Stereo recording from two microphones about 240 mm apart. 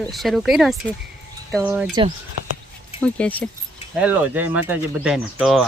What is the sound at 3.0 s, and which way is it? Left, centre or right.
Speech, centre.